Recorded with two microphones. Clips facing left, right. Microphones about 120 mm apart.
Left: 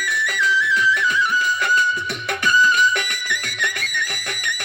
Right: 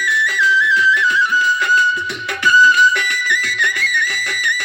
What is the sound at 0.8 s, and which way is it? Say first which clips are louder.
Music: right 3 dB; 45° left (ahead or behind).